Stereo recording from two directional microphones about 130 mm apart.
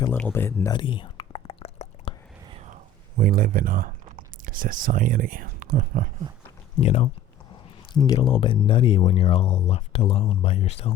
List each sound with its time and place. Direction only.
0.1 s speech: 15° left (ahead or behind)
0.7 s whispering: 40° left (ahead or behind)
2.5 s whispering: 55° right (ahead or behind)
3.2 s speech: 90° right
6.7 s speech: 50° left (ahead or behind)
7.9 s speech: 30° left (ahead or behind); by 10.9 s 50° left (ahead or behind)